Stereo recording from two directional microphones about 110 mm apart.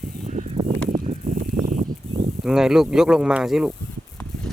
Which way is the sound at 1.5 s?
90° right.